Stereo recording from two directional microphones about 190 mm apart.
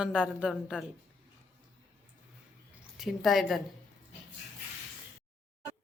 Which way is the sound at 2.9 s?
Centre (ahead or behind).